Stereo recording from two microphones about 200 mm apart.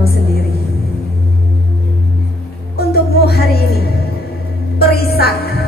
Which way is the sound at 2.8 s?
50° left (ahead or behind).